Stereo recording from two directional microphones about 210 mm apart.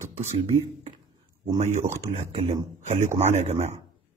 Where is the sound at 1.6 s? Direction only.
35° right (ahead or behind).